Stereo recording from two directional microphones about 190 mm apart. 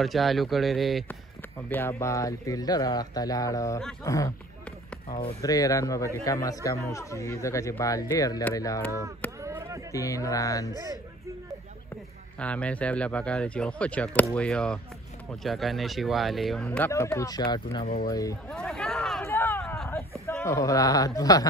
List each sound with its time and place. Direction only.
0.0 s speech: centre (ahead or behind)
1.7 s speech: 10° left (ahead or behind)
5.4 s speech: 20° left (ahead or behind)
9.4 s a sound: 15° right (ahead or behind)
9.9 s speech: 15° left (ahead or behind)
12.4 s speech: 5° left (ahead or behind); by 17.8 s 20° left (ahead or behind)
17.8 s speech: 50° left (ahead or behind)
18.5 s a sound: 5° left (ahead or behind)
20.4 s speech: 15° left (ahead or behind)